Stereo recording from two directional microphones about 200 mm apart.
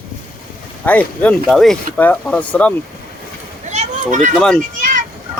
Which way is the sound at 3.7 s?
35° right (ahead or behind).